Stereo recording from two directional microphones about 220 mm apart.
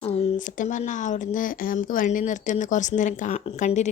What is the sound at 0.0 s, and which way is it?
Speech, 30° left (ahead or behind).